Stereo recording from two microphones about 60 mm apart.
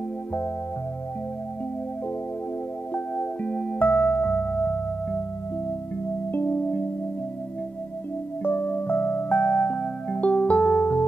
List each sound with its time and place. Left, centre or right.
2.9 s music: left
6.3 s music: left
8.5 s music: left